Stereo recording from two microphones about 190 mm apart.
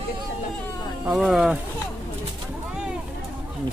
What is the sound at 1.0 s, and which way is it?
Speech, centre (ahead or behind).